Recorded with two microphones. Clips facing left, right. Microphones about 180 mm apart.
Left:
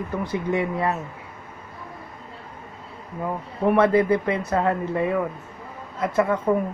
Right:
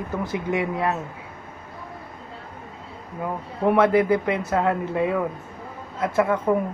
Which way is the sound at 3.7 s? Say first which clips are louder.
Even; 5° right (ahead or behind).